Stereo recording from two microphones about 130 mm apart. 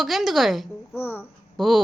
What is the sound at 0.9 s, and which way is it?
Child singing, 15° left (ahead or behind).